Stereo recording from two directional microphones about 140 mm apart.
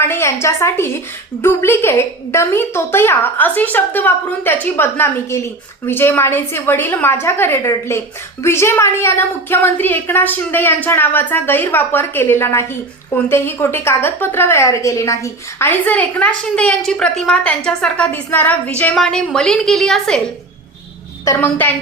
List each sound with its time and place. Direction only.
0.0 s a woman's voice: 20° left (ahead or behind)
21.2 s a woman's voice: 15° left (ahead or behind)